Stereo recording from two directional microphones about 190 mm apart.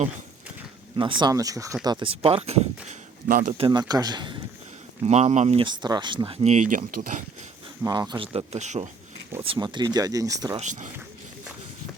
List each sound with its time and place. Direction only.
0.9 s speech: 25° right (ahead or behind)
3.2 s speech: 50° right (ahead or behind)
3.6 s speech: 20° right (ahead or behind)
5.0 s speech: 35° right (ahead or behind)
5.6 s speech: 25° right (ahead or behind); by 7.3 s 45° right (ahead or behind)
7.9 s speech: 20° right (ahead or behind); by 8.9 s 35° right (ahead or behind)
9.4 s speech: 25° right (ahead or behind)
10.6 s speech: 40° right (ahead or behind)